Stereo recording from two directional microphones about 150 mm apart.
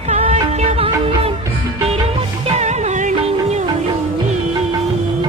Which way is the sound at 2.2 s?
40° right (ahead or behind).